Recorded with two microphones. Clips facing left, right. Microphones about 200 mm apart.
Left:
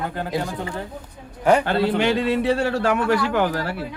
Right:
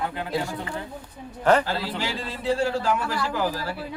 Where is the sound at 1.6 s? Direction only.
60° left (ahead or behind).